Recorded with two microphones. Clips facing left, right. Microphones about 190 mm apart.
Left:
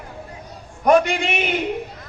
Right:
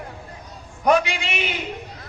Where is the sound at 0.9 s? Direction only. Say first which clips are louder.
Left 4 dB; 50° left (ahead or behind).